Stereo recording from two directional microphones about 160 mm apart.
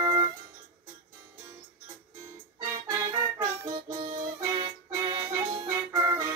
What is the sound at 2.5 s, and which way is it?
Music, 20° right (ahead or behind).